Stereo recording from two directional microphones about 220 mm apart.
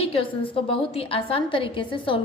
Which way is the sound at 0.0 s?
25° left (ahead or behind).